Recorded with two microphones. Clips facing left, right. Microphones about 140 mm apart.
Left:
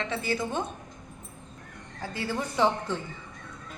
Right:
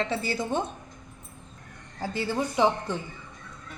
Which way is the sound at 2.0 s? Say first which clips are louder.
Right 3 dB; 30° right (ahead or behind).